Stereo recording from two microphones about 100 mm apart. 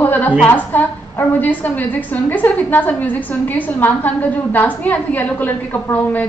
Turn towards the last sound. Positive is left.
turn(degrees=15)  # may be behind; listen again after turning